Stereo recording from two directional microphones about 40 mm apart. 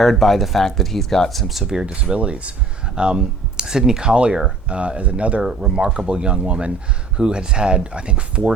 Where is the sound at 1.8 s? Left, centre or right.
Right.